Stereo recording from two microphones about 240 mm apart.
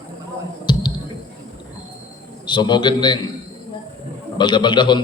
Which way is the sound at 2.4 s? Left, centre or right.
Centre.